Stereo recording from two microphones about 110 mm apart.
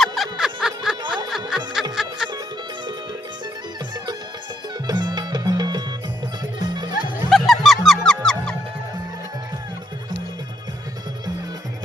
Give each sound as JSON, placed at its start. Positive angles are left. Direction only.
{"t": 0.0, "sound": "music", "side_deg": 0}
{"t": 1.5, "sound": "snicker", "side_deg": -5}
{"t": 2.0, "sound": "music", "side_deg": -5}
{"t": 4.9, "sound": "music", "side_deg": -40}
{"t": 7.3, "sound": "music", "side_deg": 0}